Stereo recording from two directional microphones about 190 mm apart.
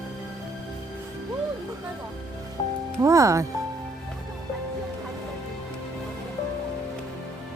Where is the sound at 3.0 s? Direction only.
15° right (ahead or behind).